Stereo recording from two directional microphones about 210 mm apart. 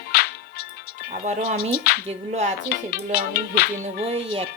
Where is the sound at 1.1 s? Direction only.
35° right (ahead or behind).